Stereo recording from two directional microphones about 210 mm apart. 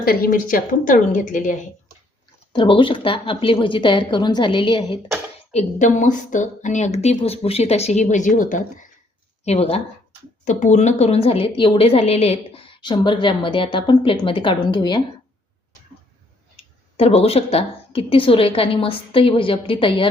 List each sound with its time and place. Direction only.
0.0 s speech: 45° left (ahead or behind)
2.5 s a woman's voice: 25° left (ahead or behind)
5.5 s a woman's voice: 35° left (ahead or behind)
17.0 s a woman's voice: 30° left (ahead or behind)